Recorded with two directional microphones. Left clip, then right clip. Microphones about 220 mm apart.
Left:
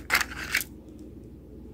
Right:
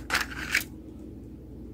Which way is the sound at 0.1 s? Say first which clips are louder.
Left 1 dB; 10° left (ahead or behind).